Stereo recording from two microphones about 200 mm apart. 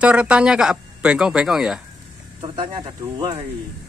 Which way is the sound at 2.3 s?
25° right (ahead or behind).